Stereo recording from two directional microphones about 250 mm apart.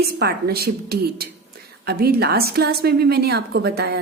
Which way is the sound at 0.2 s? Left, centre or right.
Right.